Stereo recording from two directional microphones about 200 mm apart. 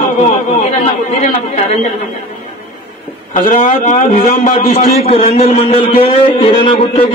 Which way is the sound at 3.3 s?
40° left (ahead or behind).